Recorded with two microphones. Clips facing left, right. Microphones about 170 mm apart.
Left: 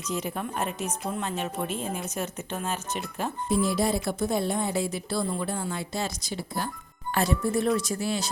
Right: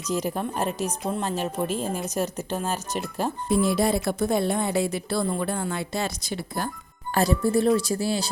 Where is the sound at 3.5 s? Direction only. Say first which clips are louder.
Right 3 dB; 65° right (ahead or behind).